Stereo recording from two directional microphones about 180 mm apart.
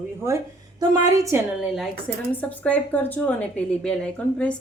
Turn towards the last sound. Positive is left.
turn(degrees=5)  # may be behind; listen again after turning